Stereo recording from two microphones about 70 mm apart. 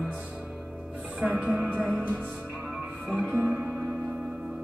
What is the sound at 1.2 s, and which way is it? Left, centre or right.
Music, right.